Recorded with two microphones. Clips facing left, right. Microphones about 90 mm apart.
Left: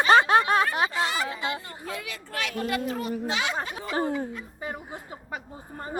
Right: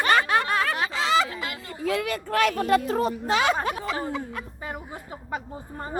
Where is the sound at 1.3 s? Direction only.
25° left (ahead or behind).